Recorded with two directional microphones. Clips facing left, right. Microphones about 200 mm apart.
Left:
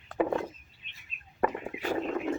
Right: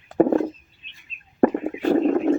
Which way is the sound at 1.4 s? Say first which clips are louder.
Right 12 dB; 45° right (ahead or behind).